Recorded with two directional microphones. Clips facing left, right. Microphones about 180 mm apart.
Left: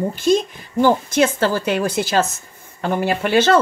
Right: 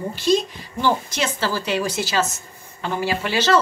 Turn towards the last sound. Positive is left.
turn(degrees=55)  # may be behind; listen again after turning